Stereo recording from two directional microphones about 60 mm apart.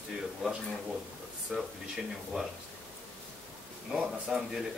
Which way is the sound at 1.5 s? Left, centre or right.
Centre.